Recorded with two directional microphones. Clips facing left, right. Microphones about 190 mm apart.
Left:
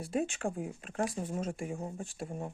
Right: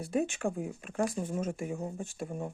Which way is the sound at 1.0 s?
50° right (ahead or behind).